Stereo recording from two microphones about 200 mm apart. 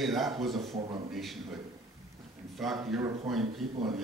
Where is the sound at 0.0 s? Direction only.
Centre (ahead or behind).